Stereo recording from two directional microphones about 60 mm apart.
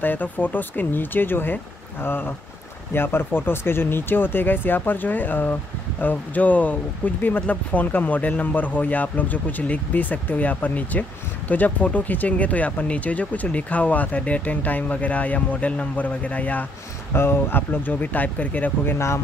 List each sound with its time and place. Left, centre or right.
0.0 s speech: left
17.1 s speech: left